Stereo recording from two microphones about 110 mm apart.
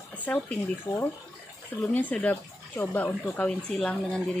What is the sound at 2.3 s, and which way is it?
Speech, 25° left (ahead or behind).